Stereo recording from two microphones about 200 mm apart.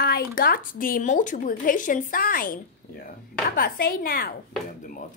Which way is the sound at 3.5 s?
50° left (ahead or behind).